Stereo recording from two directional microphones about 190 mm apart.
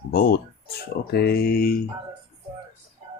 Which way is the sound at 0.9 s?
55° left (ahead or behind).